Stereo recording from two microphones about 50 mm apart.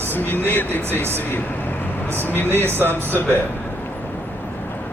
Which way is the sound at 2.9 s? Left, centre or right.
Left.